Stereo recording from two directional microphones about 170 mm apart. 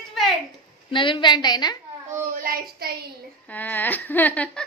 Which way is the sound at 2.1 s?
60° right (ahead or behind).